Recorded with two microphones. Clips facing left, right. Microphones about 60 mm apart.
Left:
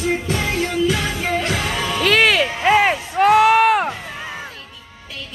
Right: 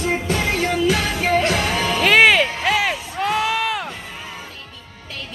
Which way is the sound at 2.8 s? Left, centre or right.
Left.